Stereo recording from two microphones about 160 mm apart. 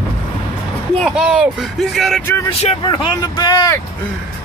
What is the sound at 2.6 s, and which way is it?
Speech, 30° left (ahead or behind).